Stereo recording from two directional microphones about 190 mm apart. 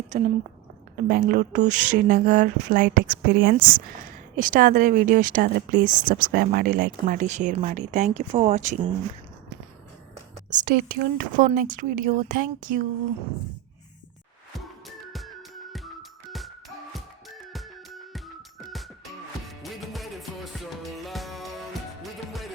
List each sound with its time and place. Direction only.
0.1 s speech: 35° right (ahead or behind)
1.0 s speech: 50° right (ahead or behind)
10.5 s speech: 45° right (ahead or behind)
15.1 s music: centre (ahead or behind)
19.5 s music: centre (ahead or behind)